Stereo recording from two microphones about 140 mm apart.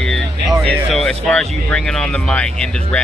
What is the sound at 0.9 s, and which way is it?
Speech, centre (ahead or behind).